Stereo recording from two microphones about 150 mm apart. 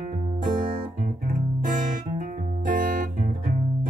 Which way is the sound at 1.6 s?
60° right (ahead or behind).